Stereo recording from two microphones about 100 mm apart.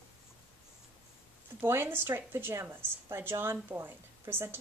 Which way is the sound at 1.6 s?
20° right (ahead or behind).